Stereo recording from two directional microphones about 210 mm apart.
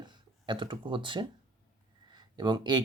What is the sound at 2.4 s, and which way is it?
Speech, 20° right (ahead or behind).